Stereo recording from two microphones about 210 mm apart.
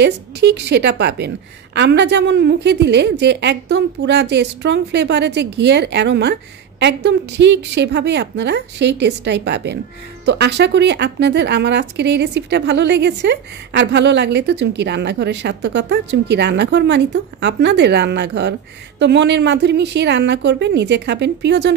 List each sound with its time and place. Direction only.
0.0 s a woman's voice: 55° right (ahead or behind)